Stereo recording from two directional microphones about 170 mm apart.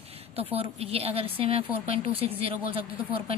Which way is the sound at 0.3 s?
35° right (ahead or behind).